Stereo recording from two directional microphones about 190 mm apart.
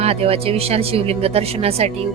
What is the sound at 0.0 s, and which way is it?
Speech, 30° right (ahead or behind).